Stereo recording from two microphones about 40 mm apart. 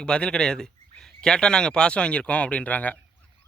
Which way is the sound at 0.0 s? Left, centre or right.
Left.